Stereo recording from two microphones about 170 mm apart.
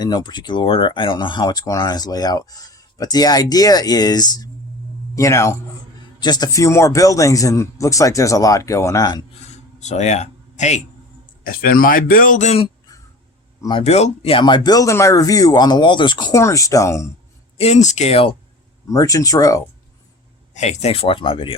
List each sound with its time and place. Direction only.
0.0 s speech: 25° left (ahead or behind)
9.8 s speech: 40° left (ahead or behind)
11.4 s speech: 55° left (ahead or behind)
13.6 s speech: 25° left (ahead or behind)
13.8 s speech: 40° left (ahead or behind); by 17.1 s 15° left (ahead or behind)
17.6 s speech: 40° left (ahead or behind)
18.9 s speech: 20° left (ahead or behind)
20.5 s speech: 45° left (ahead or behind)